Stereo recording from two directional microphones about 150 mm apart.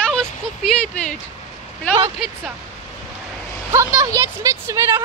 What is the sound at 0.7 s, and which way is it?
Speech, 5° left (ahead or behind).